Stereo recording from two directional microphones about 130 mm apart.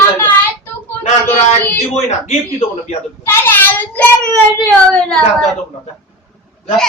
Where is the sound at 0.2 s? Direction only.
15° left (ahead or behind).